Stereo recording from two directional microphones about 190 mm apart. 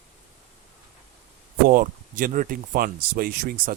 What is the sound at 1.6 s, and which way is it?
Speech, 45° right (ahead or behind).